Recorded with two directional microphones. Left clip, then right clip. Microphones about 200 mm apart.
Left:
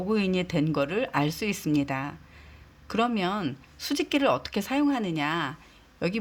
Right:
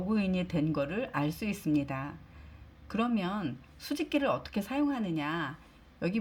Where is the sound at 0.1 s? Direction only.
40° left (ahead or behind).